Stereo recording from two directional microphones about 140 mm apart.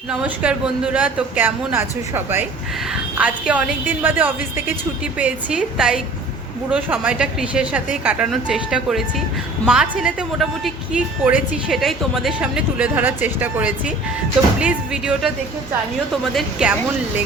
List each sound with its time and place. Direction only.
0.1 s a woman's voice: 10° right (ahead or behind)
16.3 s a woman's voice: 5° right (ahead or behind)